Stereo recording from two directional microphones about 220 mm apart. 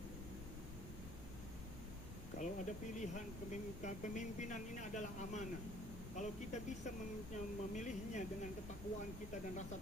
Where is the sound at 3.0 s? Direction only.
35° left (ahead or behind).